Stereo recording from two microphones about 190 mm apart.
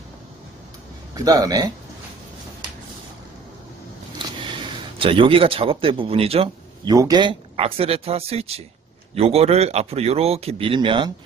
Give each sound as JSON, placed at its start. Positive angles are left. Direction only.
{"t": 1.1, "sound": "a man's voice", "side_deg": -20}
{"t": 4.9, "sound": "a man's voice", "side_deg": -30}